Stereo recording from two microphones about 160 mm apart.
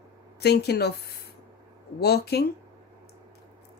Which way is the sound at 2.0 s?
90° left.